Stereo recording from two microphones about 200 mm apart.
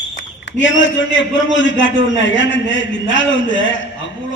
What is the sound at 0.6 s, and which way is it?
A man's voice, 65° left (ahead or behind).